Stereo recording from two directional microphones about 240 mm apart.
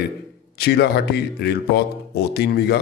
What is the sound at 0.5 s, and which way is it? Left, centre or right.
Speech, left.